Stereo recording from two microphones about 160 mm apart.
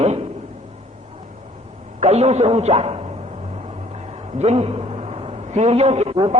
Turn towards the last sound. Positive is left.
turn(degrees=-45)  # may be behind; listen again after turning